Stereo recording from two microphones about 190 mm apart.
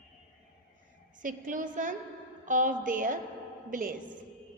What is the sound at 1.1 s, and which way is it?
A woman's voice, 45° right (ahead or behind).